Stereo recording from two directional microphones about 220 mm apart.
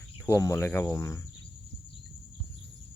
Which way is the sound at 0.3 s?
10° left (ahead or behind).